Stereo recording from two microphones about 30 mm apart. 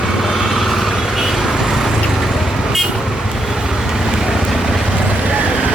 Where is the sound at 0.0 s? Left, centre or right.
Centre.